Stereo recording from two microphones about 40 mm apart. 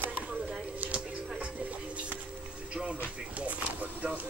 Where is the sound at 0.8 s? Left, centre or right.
Right.